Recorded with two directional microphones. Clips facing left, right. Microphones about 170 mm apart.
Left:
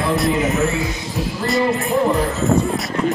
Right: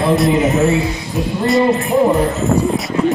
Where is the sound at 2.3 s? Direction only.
Centre (ahead or behind).